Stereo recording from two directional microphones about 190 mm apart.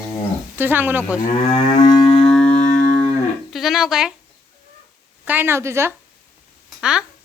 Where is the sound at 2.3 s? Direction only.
5° left (ahead or behind).